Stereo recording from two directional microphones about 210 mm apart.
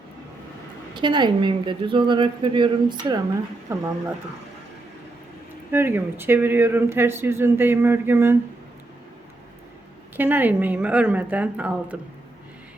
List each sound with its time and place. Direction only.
0.9 s a woman's voice: 20° right (ahead or behind)
5.7 s speech: 10° right (ahead or behind)
10.2 s speech: 10° right (ahead or behind)